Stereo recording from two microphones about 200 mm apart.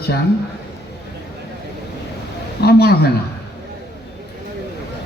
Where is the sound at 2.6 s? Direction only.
50° left (ahead or behind).